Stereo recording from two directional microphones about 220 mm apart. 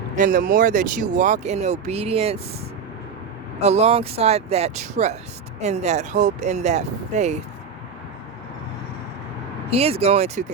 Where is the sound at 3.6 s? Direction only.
30° right (ahead or behind).